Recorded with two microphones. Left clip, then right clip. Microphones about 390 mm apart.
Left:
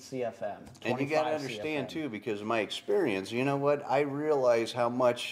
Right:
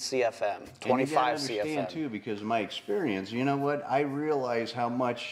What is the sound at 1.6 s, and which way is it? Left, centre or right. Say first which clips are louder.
Speech: right 2 dB; left.